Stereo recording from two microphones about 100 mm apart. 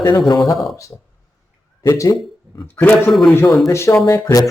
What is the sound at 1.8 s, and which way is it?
Speech, 30° left (ahead or behind).